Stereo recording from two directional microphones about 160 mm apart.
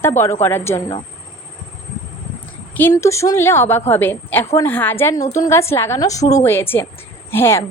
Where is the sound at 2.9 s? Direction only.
20° left (ahead or behind).